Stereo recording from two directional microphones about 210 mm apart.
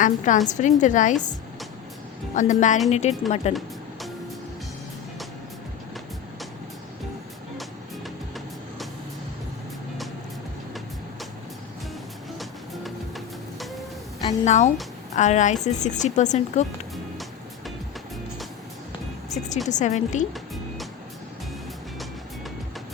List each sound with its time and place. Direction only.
0.0 s speech: 35° left (ahead or behind)
2.3 s speech: 35° left (ahead or behind)
12.4 s music: centre (ahead or behind)
14.4 s a woman's voice: 35° left (ahead or behind)
19.7 s speech: 35° left (ahead or behind)